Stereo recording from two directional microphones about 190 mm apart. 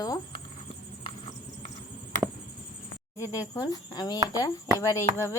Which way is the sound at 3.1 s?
15° left (ahead or behind).